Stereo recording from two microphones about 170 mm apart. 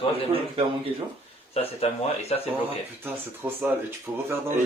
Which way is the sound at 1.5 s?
35° left (ahead or behind).